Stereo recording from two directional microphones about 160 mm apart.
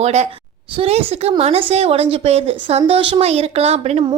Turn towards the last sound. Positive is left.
turn(degrees=-40)  # may be behind; listen again after turning